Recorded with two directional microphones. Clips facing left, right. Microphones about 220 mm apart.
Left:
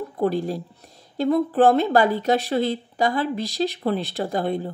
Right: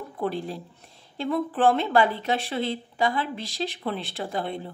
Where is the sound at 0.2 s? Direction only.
40° left (ahead or behind).